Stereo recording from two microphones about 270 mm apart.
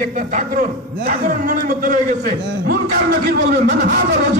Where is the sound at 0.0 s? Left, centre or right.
Right.